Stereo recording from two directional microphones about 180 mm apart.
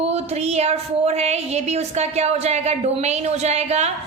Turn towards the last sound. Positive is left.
turn(degrees=-35)  # may be behind; listen again after turning